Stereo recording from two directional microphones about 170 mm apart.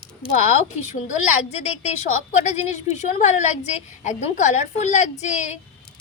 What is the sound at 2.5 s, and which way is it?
A woman's voice, 45° left (ahead or behind).